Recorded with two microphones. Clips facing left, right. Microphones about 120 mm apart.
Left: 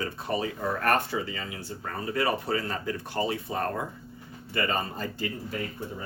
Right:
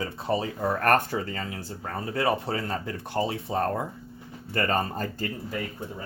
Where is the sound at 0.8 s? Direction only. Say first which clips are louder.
Right 3 dB; 45° right (ahead or behind).